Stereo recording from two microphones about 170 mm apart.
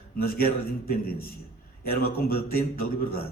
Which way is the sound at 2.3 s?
60° left (ahead or behind).